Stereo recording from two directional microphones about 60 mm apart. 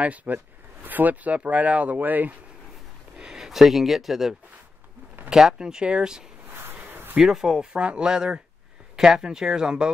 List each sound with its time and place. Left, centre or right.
0.0 s speech: right
3.2 s speech: centre
6.6 s a sound: right
7.2 s speech: centre